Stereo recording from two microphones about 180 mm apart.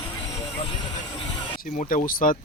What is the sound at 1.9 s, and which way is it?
Speech, 50° left (ahead or behind).